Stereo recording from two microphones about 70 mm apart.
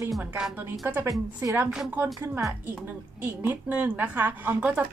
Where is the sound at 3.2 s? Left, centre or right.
Right.